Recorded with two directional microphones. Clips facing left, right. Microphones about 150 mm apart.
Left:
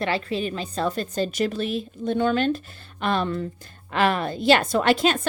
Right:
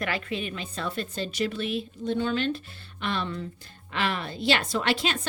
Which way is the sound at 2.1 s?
55° left (ahead or behind).